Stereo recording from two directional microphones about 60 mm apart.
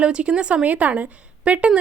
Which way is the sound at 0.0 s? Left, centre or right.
Centre.